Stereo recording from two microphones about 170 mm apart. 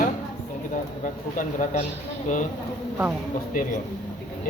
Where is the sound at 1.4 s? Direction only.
50° left (ahead or behind).